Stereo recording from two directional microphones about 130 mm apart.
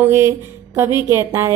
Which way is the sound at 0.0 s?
20° right (ahead or behind).